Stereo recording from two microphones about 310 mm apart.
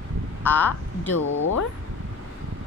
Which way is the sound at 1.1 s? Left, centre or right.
Left.